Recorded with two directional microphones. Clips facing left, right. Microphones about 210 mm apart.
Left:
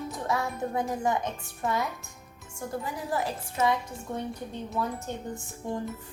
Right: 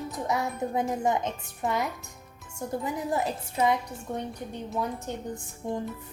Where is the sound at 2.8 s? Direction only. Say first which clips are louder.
Right 3 dB; 25° right (ahead or behind).